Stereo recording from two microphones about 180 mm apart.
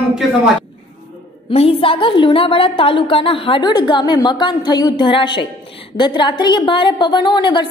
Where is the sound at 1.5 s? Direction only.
30° left (ahead or behind).